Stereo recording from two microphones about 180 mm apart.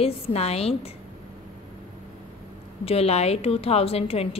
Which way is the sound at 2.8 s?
35° left (ahead or behind).